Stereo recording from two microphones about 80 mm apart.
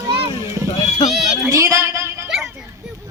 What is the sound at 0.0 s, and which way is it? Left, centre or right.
Boat, right.